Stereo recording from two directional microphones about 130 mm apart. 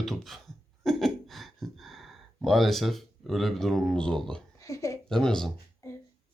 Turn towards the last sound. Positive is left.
turn(degrees=25)  # may be behind; listen again after turning